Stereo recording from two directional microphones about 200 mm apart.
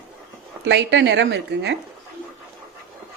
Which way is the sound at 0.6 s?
60° right (ahead or behind).